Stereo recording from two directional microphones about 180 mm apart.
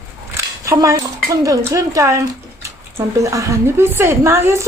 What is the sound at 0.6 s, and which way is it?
Speech, 15° right (ahead or behind).